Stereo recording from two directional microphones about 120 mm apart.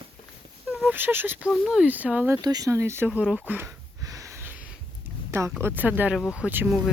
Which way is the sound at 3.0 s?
10° right (ahead or behind).